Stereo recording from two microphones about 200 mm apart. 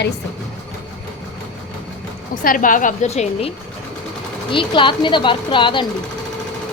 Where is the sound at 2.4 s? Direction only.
45° left (ahead or behind); by 5.8 s 25° left (ahead or behind).